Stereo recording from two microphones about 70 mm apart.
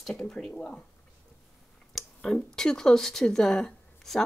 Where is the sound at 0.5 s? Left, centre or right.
Centre.